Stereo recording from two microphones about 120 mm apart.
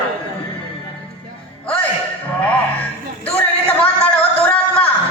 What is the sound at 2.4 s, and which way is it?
Music, 15° left (ahead or behind).